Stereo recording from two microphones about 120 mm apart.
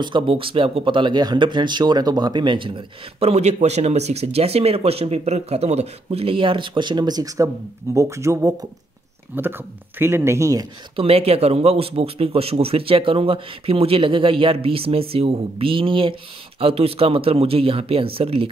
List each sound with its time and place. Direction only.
0.0 s speech: 45° right (ahead or behind); by 10.7 s 25° right (ahead or behind)
11.0 s speech: 55° right (ahead or behind)